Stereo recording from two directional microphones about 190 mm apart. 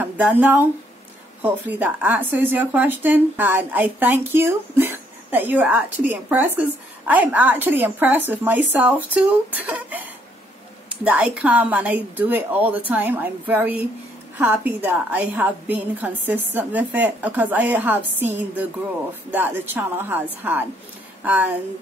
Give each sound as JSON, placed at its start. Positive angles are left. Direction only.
{"t": 0.0, "sound": "a woman's voice", "side_deg": -10}